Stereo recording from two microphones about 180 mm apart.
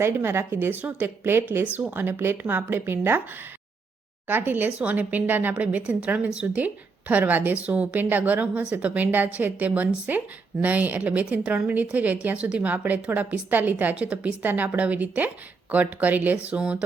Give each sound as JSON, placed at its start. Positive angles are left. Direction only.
{"t": 0.0, "sound": "speech", "side_deg": -15}
{"t": 4.3, "sound": "speech", "side_deg": -10}